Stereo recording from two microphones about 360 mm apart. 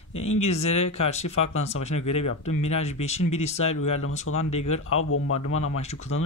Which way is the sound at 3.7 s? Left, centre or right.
Left.